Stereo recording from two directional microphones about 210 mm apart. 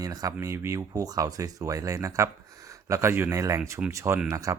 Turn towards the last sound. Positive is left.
turn(degrees=-15)  # may be behind; listen again after turning